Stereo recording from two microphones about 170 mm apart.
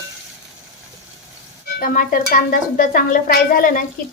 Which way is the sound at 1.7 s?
55° left (ahead or behind).